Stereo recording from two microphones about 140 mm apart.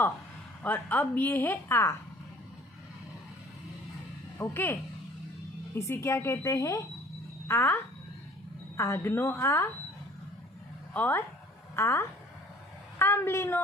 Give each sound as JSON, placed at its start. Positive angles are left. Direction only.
{"t": 0.6, "sound": "a woman's voice", "side_deg": 15}
{"t": 4.4, "sound": "a woman's voice", "side_deg": 15}
{"t": 5.8, "sound": "a woman's voice", "side_deg": 20}
{"t": 10.9, "sound": "a woman's voice", "side_deg": 15}